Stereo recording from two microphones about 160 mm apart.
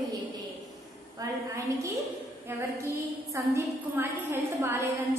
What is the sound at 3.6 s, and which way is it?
A woman's voice, 15° right (ahead or behind).